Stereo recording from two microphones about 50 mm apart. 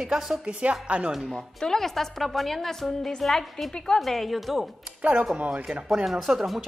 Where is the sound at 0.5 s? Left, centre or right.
Right.